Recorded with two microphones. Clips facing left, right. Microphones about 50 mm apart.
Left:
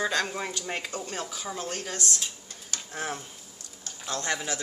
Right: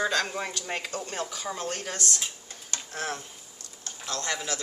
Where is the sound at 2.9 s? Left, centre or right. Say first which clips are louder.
Even; centre.